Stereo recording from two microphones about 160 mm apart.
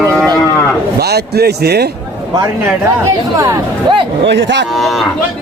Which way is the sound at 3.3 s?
20° right (ahead or behind).